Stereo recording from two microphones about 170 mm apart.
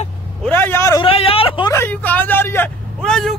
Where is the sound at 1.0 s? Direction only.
35° left (ahead or behind).